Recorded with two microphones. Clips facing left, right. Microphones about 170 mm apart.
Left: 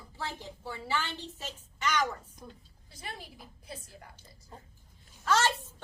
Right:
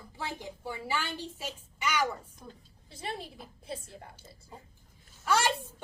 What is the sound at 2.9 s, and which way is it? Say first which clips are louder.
A woman's voice: right 6 dB; 25° right (ahead or behind).